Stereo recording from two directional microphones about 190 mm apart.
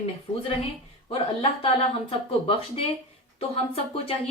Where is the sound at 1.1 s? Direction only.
30° left (ahead or behind).